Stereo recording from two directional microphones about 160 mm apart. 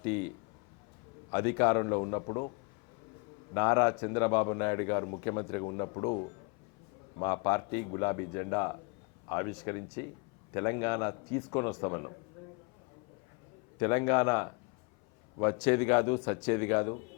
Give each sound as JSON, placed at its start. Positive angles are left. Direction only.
{"t": 0.0, "sound": "a man's voice", "side_deg": 15}
{"t": 1.3, "sound": "a man's voice", "side_deg": 15}
{"t": 3.5, "sound": "a man's voice", "side_deg": 20}
{"t": 13.7, "sound": "a man's voice", "side_deg": 20}